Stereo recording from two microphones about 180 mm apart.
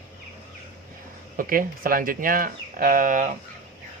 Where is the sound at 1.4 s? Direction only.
50° right (ahead or behind).